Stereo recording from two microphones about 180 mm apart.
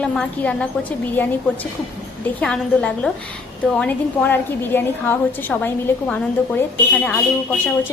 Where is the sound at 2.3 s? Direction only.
5° left (ahead or behind).